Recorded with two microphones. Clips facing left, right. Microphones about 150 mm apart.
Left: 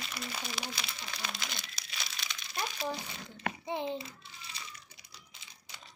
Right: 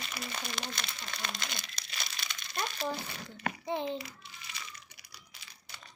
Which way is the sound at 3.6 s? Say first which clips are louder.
Right 1 dB; 15° left (ahead or behind).